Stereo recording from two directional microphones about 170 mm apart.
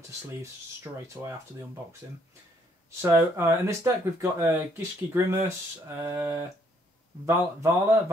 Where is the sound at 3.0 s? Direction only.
15° right (ahead or behind).